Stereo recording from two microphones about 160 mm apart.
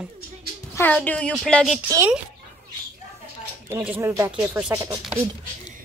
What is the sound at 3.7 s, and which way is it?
Speech, 10° right (ahead or behind).